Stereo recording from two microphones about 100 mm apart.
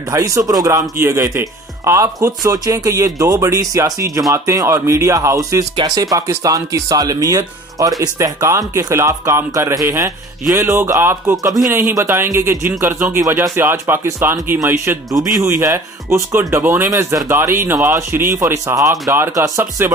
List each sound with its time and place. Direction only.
0.1 s speech: 30° right (ahead or behind)